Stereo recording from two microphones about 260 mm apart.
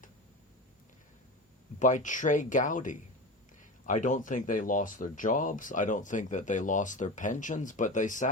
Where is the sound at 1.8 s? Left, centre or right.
Left.